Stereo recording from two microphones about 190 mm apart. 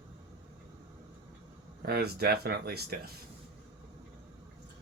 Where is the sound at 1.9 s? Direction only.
55° right (ahead or behind).